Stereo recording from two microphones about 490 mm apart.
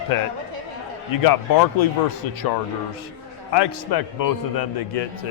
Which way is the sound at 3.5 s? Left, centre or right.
Left.